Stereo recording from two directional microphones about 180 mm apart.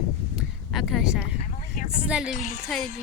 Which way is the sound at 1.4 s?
45° left (ahead or behind).